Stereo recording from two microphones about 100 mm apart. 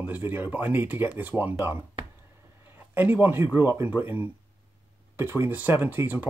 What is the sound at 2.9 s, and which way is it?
Speech, 20° right (ahead or behind).